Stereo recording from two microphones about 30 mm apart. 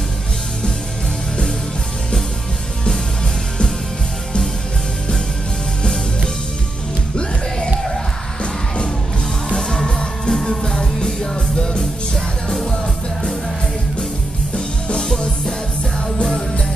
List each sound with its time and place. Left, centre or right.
9.8 s music: left
15.0 s music: left